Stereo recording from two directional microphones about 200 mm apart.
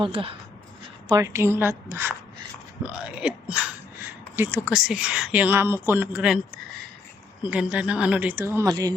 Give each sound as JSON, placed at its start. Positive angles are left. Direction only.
{"t": 0.0, "sound": "speech", "side_deg": -30}
{"t": 1.1, "sound": "a woman's voice", "side_deg": -15}
{"t": 7.4, "sound": "a woman's voice", "side_deg": -5}